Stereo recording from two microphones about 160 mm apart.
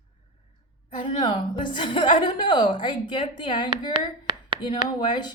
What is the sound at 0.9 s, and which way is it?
A woman's voice, 30° left (ahead or behind).